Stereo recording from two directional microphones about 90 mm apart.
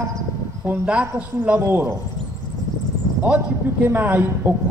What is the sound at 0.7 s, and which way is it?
A man's voice, 15° right (ahead or behind).